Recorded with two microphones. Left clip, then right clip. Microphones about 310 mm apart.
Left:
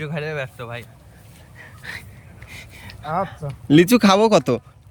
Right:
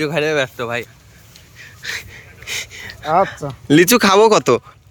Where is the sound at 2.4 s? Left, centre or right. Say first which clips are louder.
Right 13 dB; centre.